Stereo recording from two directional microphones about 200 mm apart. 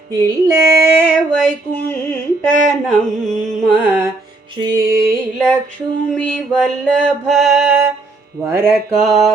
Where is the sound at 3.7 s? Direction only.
10° right (ahead or behind).